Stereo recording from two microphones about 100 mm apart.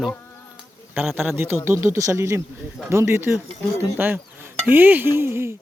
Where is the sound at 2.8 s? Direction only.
25° right (ahead or behind).